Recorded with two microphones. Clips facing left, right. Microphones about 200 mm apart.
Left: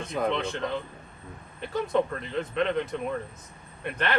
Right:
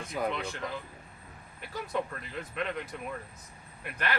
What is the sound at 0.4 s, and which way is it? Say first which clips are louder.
Speech: left 7 dB; 25° left (ahead or behind).